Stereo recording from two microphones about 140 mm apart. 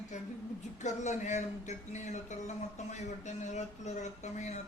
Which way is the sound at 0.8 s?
55° left (ahead or behind).